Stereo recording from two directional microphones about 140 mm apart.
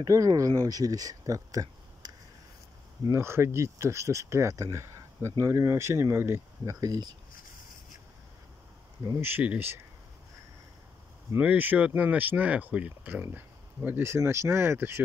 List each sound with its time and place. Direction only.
0.0 s speech: 25° right (ahead or behind)
9.0 s speech: 20° right (ahead or behind)
11.3 s speech: 10° right (ahead or behind)